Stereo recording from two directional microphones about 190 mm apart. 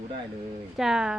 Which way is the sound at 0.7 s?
Centre (ahead or behind).